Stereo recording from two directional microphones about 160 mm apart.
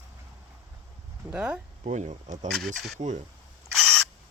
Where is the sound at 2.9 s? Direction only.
50° right (ahead or behind).